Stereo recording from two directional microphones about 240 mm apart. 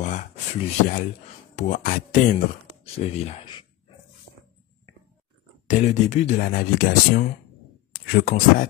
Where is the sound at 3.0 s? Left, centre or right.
Left.